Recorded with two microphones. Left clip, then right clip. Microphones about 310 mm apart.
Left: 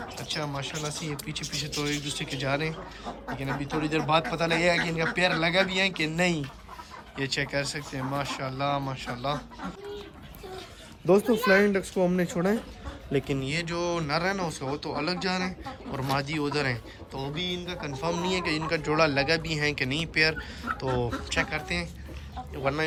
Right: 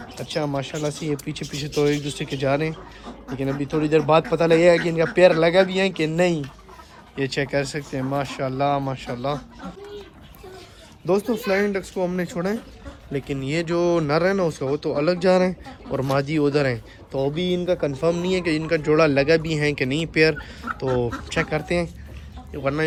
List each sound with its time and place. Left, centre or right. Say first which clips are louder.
0.3 s speech: right 8 dB; centre
11.0 s speech: even; centre
13.1 s speech: even; left
13.4 s speech: right 7 dB; centre